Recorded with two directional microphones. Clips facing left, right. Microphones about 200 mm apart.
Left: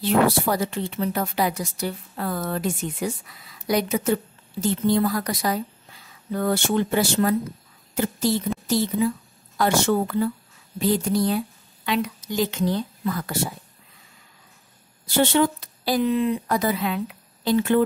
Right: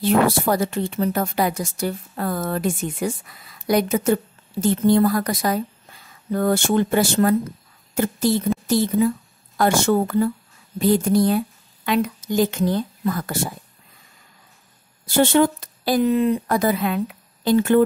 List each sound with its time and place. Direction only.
0.0 s a woman's voice: 50° right (ahead or behind)
15.0 s a woman's voice: 50° right (ahead or behind)